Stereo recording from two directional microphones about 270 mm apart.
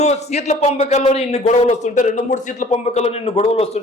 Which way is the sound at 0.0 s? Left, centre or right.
Left.